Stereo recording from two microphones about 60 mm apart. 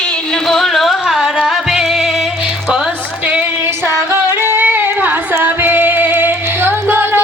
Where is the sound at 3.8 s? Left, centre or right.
Right.